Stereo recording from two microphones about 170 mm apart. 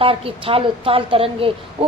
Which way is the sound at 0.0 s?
35° right (ahead or behind).